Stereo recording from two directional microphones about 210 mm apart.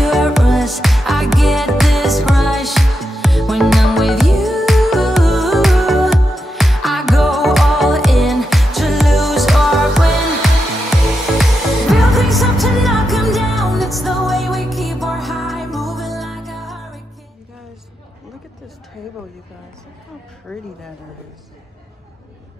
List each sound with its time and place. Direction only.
0.0 s music: centre (ahead or behind)
11.9 s music: centre (ahead or behind)